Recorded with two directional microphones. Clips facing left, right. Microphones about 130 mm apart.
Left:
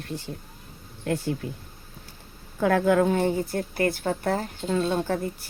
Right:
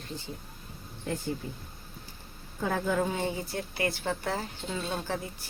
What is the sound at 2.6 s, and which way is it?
Speech, 70° left (ahead or behind).